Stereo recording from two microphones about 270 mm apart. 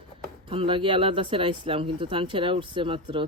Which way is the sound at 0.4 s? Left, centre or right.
Centre.